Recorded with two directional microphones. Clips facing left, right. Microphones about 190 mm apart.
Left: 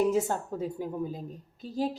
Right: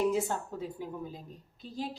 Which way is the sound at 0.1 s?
45° left (ahead or behind).